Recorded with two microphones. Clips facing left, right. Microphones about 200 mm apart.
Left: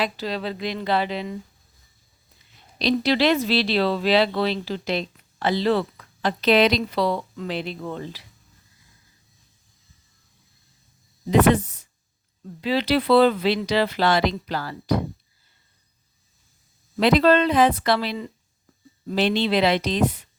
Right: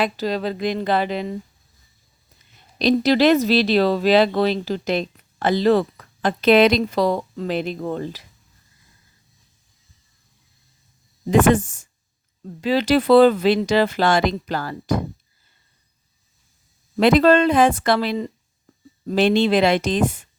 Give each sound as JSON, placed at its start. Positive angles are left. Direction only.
{"t": 0.0, "sound": "speech", "side_deg": -45}
{"t": 2.7, "sound": "speech", "side_deg": -45}
{"t": 11.3, "sound": "speech", "side_deg": -45}
{"t": 17.0, "sound": "speech", "side_deg": -50}